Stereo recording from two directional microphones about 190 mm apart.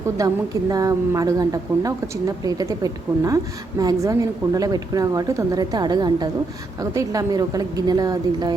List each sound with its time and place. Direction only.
0.2 s a woman's voice: 20° right (ahead or behind)